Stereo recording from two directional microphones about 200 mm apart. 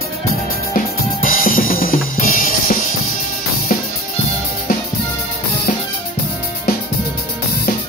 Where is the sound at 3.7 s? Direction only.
40° left (ahead or behind).